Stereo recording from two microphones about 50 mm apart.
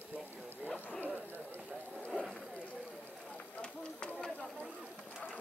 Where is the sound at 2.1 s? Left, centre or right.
Right.